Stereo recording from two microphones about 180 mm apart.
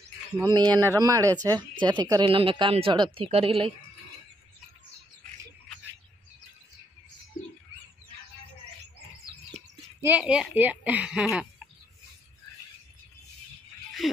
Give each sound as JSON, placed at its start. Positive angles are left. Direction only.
{"t": 0.5, "sound": "speech", "side_deg": -20}
{"t": 9.9, "sound": "a woman's voice", "side_deg": -10}